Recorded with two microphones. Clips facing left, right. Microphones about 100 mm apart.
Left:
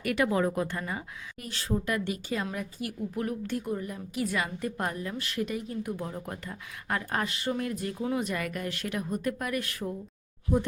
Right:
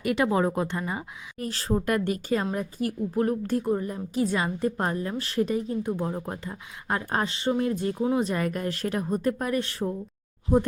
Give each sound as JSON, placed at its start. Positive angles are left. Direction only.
{"t": 0.0, "sound": "speech", "side_deg": -25}
{"t": 1.4, "sound": "a woman's voice", "side_deg": -35}